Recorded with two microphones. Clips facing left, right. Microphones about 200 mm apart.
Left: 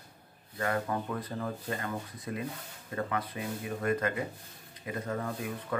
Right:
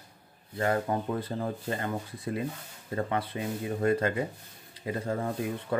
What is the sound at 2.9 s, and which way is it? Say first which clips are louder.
Speech: right 3 dB; 30° right (ahead or behind).